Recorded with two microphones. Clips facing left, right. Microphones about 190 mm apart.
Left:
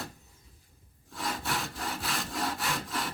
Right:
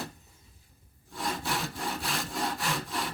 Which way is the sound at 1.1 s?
Centre (ahead or behind).